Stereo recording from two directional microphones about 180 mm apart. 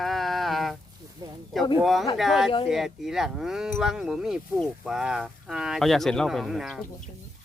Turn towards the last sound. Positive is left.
turn(degrees=0)  # may be behind; listen again after turning